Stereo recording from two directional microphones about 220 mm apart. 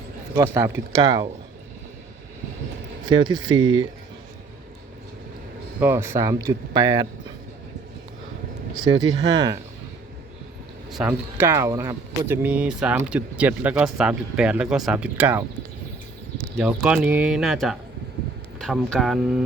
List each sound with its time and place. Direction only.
0.3 s speech: 10° right (ahead or behind)
3.1 s speech: 20° right (ahead or behind)
5.8 s speech: 10° right (ahead or behind)
8.7 s speech: 20° right (ahead or behind)
10.9 s speech: 5° right (ahead or behind)
16.6 s speech: 5° right (ahead or behind)